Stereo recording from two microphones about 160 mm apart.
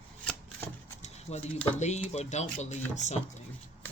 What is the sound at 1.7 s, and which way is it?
Speech, 45° left (ahead or behind).